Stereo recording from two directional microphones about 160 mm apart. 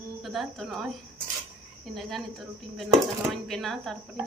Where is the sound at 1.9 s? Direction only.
Centre (ahead or behind).